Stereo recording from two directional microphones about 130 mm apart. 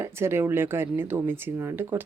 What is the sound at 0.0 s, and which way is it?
Speech, 20° right (ahead or behind).